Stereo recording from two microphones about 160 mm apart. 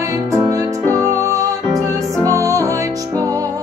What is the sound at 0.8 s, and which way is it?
Music, 15° left (ahead or behind).